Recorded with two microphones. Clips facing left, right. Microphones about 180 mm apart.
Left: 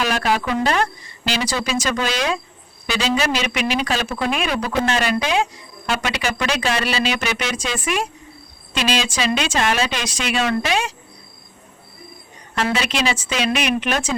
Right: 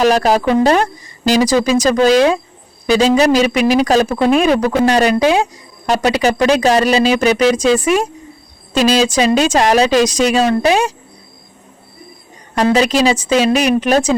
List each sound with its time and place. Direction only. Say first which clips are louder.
0.0 s speech: right 9 dB; 40° right (ahead or behind)
12.5 s speech: right 9 dB; 40° right (ahead or behind)